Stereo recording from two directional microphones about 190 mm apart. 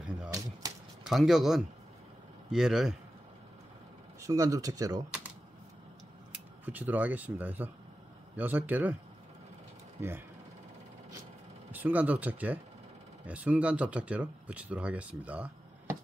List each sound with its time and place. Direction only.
0.3 s a sound: 20° right (ahead or behind)
1.0 s speech: centre (ahead or behind)
4.2 s speech: 15° right (ahead or behind)
6.6 s speech: 10° right (ahead or behind)
11.7 s speech: 10° right (ahead or behind)